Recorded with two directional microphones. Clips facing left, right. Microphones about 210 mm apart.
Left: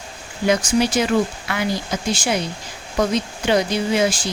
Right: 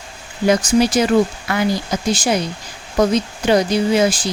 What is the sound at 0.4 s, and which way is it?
Speech, 40° right (ahead or behind).